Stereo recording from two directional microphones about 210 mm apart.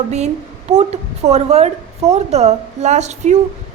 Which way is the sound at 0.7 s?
30° right (ahead or behind).